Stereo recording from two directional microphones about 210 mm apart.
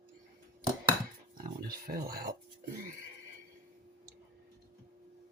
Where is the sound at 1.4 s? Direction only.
45° right (ahead or behind).